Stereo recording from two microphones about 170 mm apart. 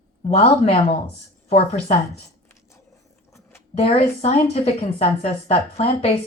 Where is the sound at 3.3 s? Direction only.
15° left (ahead or behind).